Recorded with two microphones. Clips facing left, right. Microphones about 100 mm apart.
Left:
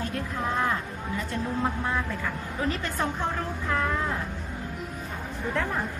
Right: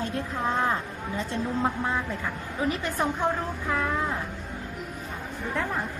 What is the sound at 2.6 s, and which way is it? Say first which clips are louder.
A woman's voice: right 2 dB; 15° right (ahead or behind).